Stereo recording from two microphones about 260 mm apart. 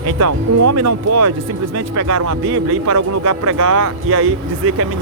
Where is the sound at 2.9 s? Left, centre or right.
Right.